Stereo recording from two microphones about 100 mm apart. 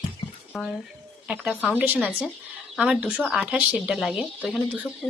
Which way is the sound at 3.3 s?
10° right (ahead or behind).